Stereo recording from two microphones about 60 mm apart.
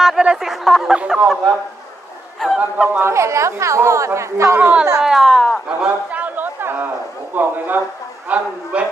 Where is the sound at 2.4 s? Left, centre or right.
Centre.